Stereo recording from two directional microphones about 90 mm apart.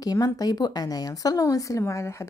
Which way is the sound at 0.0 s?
45° left (ahead or behind).